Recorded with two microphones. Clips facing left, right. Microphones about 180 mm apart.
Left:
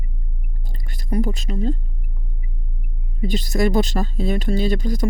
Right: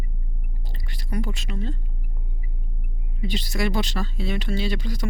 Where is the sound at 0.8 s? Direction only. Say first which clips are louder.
Left 7 dB; 45° left (ahead or behind).